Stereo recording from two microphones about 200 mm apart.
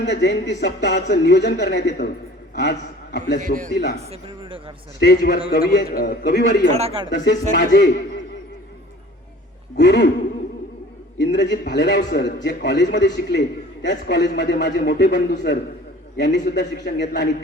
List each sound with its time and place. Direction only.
0.0 s a man's voice: 60° left (ahead or behind)
4.1 s speech: 25° right (ahead or behind)
4.9 s a man's voice: 55° left (ahead or behind)
6.7 s speech: 25° right (ahead or behind)
7.5 s a man's voice: 60° left (ahead or behind)
9.7 s a man's voice: 60° left (ahead or behind)
11.2 s a man's voice: 60° left (ahead or behind)